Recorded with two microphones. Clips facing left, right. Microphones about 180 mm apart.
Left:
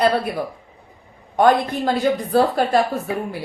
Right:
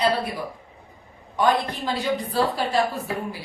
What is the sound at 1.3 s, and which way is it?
A woman's voice, 50° left (ahead or behind).